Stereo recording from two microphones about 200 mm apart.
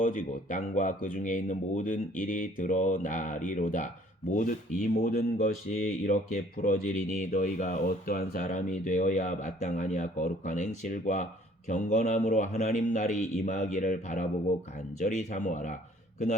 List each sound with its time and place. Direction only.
0.0 s speech: 40° left (ahead or behind)